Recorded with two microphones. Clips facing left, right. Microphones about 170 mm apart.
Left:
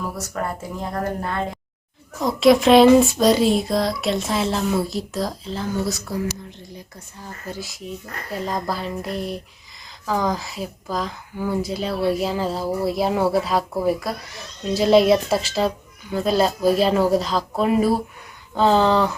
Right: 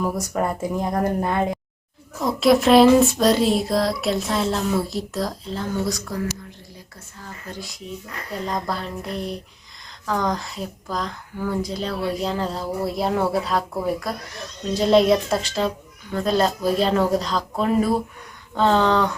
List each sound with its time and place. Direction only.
0.3 s a woman's voice: 15° right (ahead or behind)
2.1 s speech: centre (ahead or behind)
7.2 s speech: 5° left (ahead or behind)